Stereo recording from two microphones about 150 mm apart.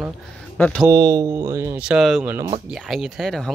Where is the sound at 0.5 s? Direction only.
10° left (ahead or behind).